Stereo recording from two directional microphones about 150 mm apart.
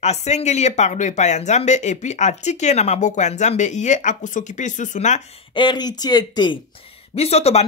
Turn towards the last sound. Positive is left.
turn(degrees=45)  # may be behind; listen again after turning